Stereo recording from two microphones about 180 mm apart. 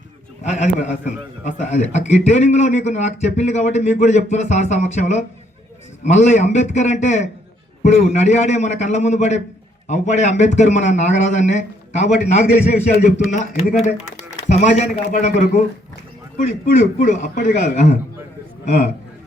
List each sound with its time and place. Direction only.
0.5 s a man's voice: 40° left (ahead or behind)
16.7 s a man's voice: 45° left (ahead or behind)